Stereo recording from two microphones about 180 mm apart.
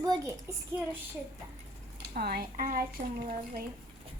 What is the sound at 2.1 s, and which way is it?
Speech, 60° right (ahead or behind).